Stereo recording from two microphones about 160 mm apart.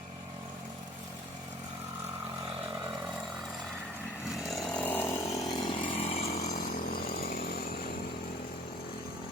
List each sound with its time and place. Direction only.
4.4 s chainsaw: centre (ahead or behind)
4.8 s chainsaw: 10° left (ahead or behind); by 5.8 s 30° left (ahead or behind)
5.9 s vehicle: 40° left (ahead or behind)
6.6 s chainsaw: 60° left (ahead or behind)